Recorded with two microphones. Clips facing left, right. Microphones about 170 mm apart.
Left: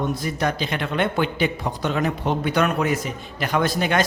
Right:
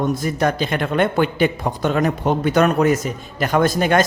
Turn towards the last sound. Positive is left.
turn(degrees=-45)  # may be behind; listen again after turning